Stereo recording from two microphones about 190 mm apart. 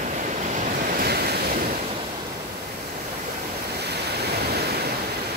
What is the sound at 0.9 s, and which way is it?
Waves, 55° right (ahead or behind).